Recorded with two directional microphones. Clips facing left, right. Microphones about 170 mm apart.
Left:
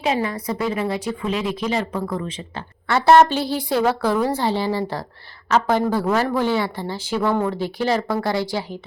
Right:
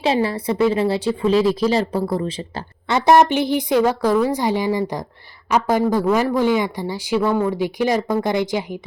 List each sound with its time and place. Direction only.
0.0 s speech: 30° right (ahead or behind)
2.9 s a woman's voice: 15° right (ahead or behind)